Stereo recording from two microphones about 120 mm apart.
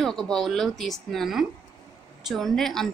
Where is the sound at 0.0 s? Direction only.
5° left (ahead or behind).